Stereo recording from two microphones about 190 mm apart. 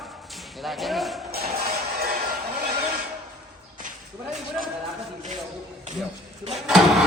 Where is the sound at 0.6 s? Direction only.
Centre (ahead or behind).